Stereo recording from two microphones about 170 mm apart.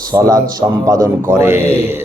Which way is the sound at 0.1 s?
20° right (ahead or behind).